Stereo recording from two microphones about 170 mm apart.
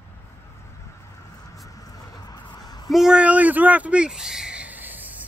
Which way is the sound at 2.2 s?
25° left (ahead or behind).